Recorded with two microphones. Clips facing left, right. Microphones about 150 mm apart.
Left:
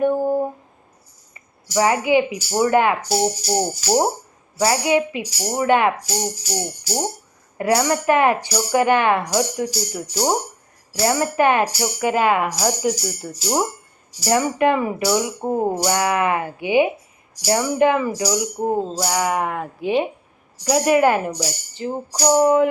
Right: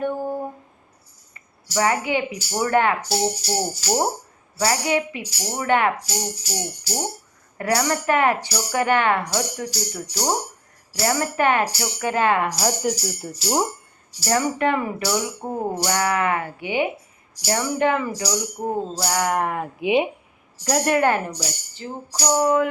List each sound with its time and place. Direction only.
0.0 s humming: 10° left (ahead or behind)
1.3 s speech: 20° left (ahead or behind)
7.6 s speech: 15° left (ahead or behind); by 13.7 s centre (ahead or behind)
14.3 s speech: 15° left (ahead or behind)
19.8 s speech: 15° right (ahead or behind)
20.7 s speech: 5° left (ahead or behind); by 22.7 s 25° left (ahead or behind)